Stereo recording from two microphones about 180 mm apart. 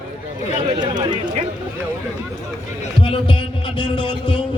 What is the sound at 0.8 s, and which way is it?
Speech, 25° right (ahead or behind).